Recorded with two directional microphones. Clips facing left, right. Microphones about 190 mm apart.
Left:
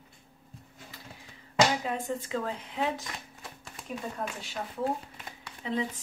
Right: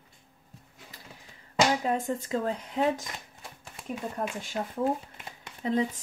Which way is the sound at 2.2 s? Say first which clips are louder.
Right 3 dB; 40° right (ahead or behind).